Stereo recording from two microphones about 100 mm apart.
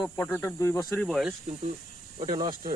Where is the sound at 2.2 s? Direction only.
45° right (ahead or behind).